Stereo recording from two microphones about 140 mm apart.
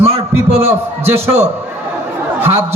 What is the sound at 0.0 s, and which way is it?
Heart sounds, 45° right (ahead or behind).